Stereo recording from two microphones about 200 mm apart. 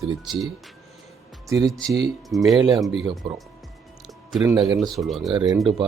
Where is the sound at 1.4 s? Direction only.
15° right (ahead or behind).